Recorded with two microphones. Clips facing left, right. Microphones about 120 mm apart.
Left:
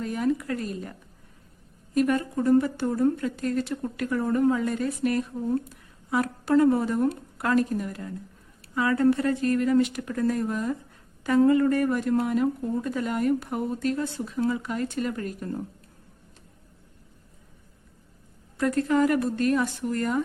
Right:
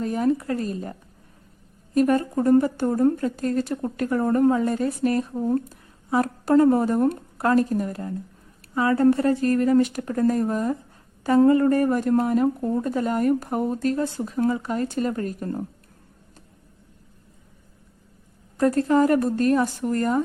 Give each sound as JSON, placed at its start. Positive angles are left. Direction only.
{"t": 0.0, "sound": "a woman's voice", "side_deg": -35}
{"t": 2.0, "sound": "a woman's voice", "side_deg": -40}
{"t": 18.5, "sound": "a woman's voice", "side_deg": -35}